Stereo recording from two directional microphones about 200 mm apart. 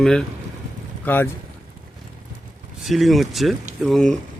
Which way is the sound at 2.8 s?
Centre (ahead or behind).